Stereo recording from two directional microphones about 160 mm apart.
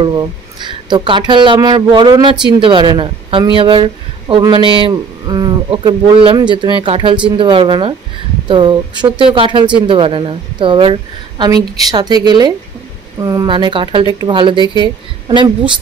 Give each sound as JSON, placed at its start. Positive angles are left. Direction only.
{"t": 0.0, "sound": "a woman's voice", "side_deg": -25}